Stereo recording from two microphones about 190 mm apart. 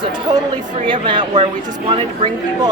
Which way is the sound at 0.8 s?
25° right (ahead or behind).